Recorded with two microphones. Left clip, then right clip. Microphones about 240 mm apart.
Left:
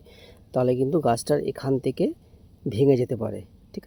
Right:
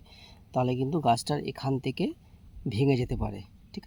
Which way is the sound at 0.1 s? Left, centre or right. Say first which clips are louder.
Left 4 dB; centre.